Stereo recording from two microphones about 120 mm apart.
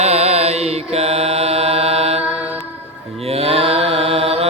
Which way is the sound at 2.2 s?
5° right (ahead or behind).